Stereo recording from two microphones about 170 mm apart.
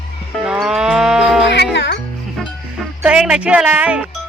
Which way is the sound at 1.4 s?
90° left.